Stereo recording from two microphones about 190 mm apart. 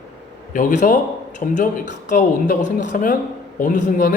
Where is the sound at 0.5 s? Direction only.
40° left (ahead or behind).